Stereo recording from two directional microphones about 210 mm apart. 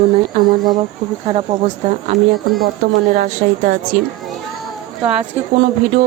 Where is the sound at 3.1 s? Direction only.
40° right (ahead or behind).